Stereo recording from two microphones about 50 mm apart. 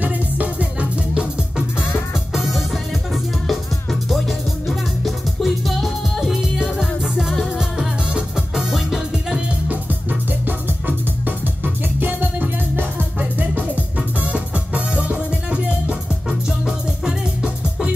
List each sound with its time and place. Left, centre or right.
0.0 s music: right
2.3 s music: centre
9.7 s music: right; by 17.9 s centre